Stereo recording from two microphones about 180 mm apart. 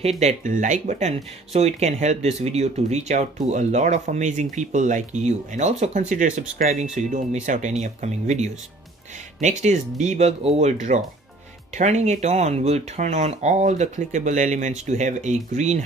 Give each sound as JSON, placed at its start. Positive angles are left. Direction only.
{"t": 0.2, "sound": "speech", "side_deg": -45}